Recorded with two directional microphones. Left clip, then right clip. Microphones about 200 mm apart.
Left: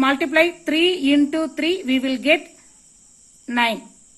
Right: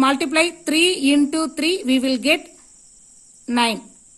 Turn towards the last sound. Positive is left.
turn(degrees=-60)  # may be behind; listen again after turning